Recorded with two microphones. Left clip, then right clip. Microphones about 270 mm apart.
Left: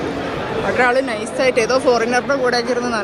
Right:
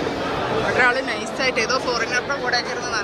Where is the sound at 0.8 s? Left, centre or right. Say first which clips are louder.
Left 4 dB; centre.